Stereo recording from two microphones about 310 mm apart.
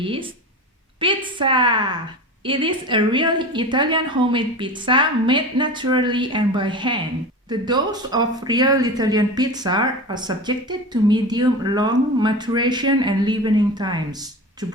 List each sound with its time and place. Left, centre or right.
0.0 s a woman's voice: centre